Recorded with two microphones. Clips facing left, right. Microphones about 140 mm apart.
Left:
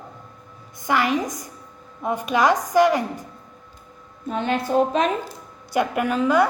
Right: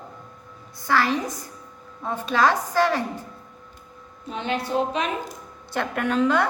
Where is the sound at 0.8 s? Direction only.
15° left (ahead or behind).